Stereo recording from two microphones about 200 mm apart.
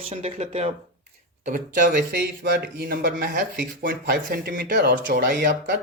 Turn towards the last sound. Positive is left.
turn(degrees=-45)  # may be behind; listen again after turning